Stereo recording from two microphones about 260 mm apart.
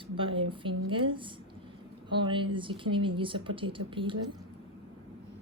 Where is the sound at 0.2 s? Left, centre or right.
Centre.